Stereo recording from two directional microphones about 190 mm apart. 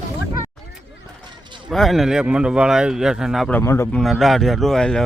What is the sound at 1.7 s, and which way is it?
Speech, centre (ahead or behind).